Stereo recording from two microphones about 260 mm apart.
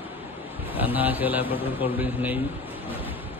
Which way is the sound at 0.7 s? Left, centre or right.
Centre.